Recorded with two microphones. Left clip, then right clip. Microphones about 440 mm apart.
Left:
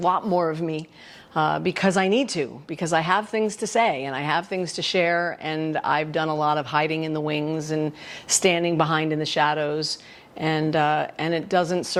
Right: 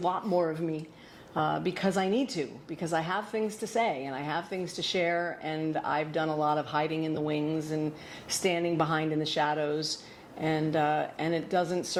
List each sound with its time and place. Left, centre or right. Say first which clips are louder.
0.0 s a woman's voice: left 7 dB; left
8.4 s a woman's voice: left 7 dB; left